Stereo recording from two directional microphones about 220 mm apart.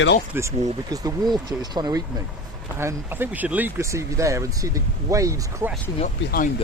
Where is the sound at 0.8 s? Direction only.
15° right (ahead or behind).